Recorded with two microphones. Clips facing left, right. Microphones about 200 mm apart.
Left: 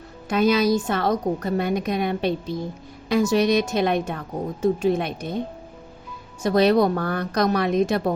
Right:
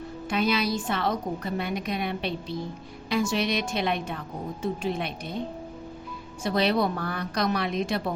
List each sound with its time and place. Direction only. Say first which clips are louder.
0.3 s a woman's voice: left 7 dB; 45° left (ahead or behind)
6.4 s a woman's voice: left 7 dB; 45° left (ahead or behind)